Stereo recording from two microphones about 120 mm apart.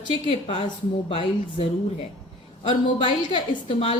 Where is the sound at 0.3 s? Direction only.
50° left (ahead or behind).